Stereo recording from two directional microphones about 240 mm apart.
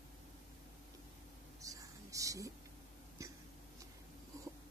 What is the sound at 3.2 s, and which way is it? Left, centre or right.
Hiccup, centre.